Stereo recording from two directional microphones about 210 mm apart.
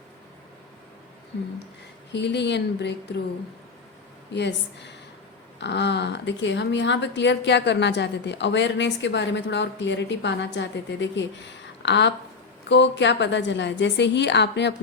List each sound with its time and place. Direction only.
2.1 s speech: 55° left (ahead or behind)
4.3 s speech: 55° left (ahead or behind)